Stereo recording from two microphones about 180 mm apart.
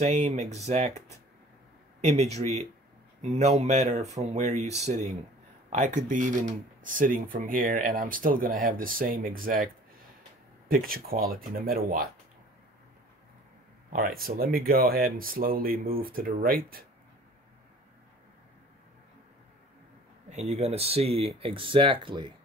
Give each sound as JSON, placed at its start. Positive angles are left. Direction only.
{"t": 0.0, "sound": "speech", "side_deg": -40}
{"t": 2.0, "sound": "speech", "side_deg": -35}
{"t": 10.7, "sound": "speech", "side_deg": -55}
{"t": 13.9, "sound": "speech", "side_deg": -55}
{"t": 20.2, "sound": "speech", "side_deg": -40}